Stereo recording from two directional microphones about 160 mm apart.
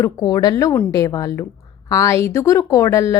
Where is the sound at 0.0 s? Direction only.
25° left (ahead or behind).